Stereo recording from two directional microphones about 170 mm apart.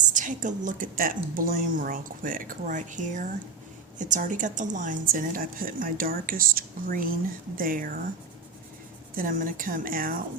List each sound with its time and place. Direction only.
0.1 s a woman's voice: 50° right (ahead or behind)
9.1 s a woman's voice: 55° right (ahead or behind)